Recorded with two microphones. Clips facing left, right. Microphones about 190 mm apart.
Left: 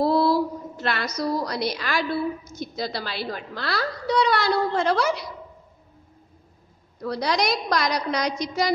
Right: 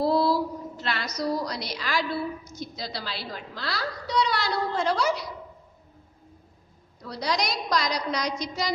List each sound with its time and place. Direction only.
0.0 s a sound: 55° left (ahead or behind)
2.6 s a woman's voice: 55° left (ahead or behind)
7.0 s a woman's voice: 60° left (ahead or behind)